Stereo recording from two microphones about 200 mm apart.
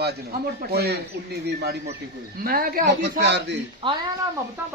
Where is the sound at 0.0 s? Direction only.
50° right (ahead or behind).